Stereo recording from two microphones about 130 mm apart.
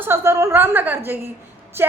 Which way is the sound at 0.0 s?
20° right (ahead or behind).